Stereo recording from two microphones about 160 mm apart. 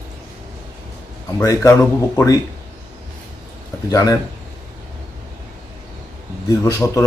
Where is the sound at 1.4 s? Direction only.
15° left (ahead or behind).